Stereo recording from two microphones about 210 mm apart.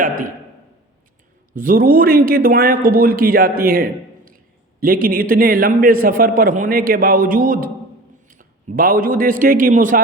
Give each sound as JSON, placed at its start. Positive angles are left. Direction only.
{"t": 0.0, "sound": "a sound", "side_deg": -40}
{"t": 1.5, "sound": "a man's voice", "side_deg": -40}
{"t": 5.0, "sound": "a man's voice", "side_deg": -45}